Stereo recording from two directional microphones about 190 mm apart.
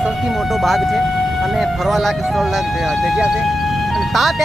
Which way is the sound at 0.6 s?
Centre (ahead or behind).